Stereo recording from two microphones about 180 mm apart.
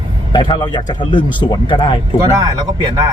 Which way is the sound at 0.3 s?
25° left (ahead or behind).